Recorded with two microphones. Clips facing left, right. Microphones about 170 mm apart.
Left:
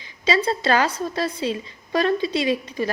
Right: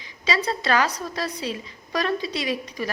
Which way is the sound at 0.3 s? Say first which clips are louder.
Left 4 dB; 30° left (ahead or behind).